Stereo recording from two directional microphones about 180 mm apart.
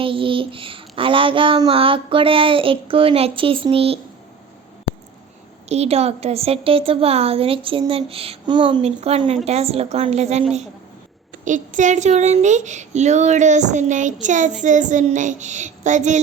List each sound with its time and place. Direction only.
0.0 s a child's voice: 30° right (ahead or behind)
5.6 s a woman's voice: 35° right (ahead or behind)
11.4 s speech: 45° right (ahead or behind)